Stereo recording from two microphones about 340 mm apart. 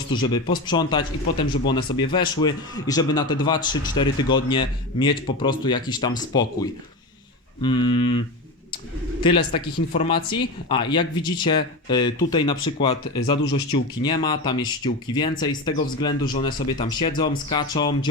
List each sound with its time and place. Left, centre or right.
0.1 s speech: centre
9.2 s speech: centre